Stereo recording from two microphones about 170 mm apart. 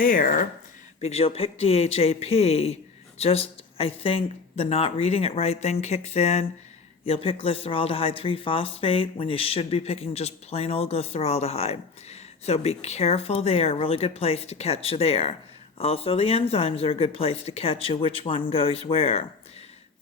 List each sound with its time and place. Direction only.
0.0 s speech: 55° left (ahead or behind)
1.0 s speech: 35° left (ahead or behind)